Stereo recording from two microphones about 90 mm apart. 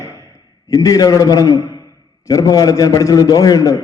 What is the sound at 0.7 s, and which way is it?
A man's voice, 40° left (ahead or behind).